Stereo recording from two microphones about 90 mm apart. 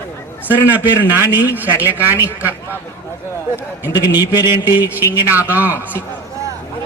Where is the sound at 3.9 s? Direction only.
45° left (ahead or behind).